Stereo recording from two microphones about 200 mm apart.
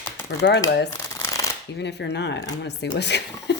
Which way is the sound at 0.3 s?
60° left (ahead or behind).